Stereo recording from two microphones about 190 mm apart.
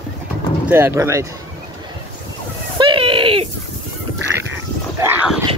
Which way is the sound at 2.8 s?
25° right (ahead or behind).